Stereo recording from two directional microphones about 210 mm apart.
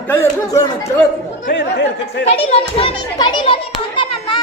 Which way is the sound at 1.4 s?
55° left (ahead or behind).